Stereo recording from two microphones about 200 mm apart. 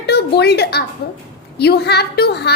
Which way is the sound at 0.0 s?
55° left (ahead or behind).